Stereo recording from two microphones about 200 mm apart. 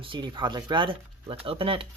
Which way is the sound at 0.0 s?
25° right (ahead or behind).